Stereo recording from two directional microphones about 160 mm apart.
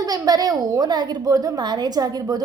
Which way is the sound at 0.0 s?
25° right (ahead or behind).